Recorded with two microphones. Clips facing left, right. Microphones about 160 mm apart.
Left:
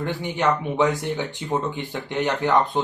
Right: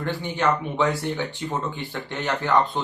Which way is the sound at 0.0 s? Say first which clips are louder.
Left 1 dB; 15° left (ahead or behind).